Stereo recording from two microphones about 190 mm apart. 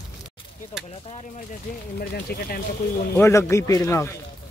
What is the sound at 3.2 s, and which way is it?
Speech, 15° left (ahead or behind).